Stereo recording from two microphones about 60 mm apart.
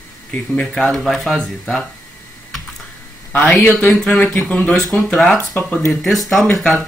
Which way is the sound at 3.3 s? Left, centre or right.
Centre.